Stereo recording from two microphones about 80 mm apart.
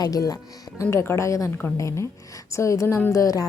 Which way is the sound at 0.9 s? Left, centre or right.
Left.